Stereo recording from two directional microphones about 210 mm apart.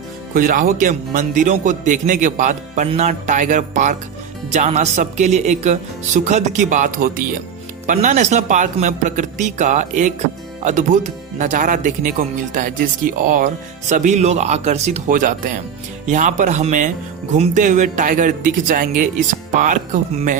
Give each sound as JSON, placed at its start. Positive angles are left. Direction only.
{"t": 0.3, "sound": "speech", "side_deg": -40}